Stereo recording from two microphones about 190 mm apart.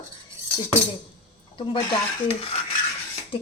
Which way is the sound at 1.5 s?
25° left (ahead or behind).